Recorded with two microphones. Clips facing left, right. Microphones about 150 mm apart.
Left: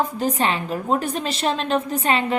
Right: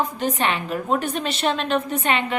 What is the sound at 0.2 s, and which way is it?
A woman's voice, 35° left (ahead or behind).